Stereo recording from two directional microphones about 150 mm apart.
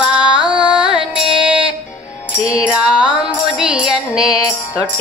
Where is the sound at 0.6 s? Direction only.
5° right (ahead or behind).